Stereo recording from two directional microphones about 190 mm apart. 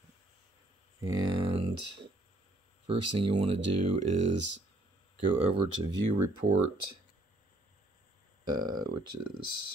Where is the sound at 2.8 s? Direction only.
30° right (ahead or behind).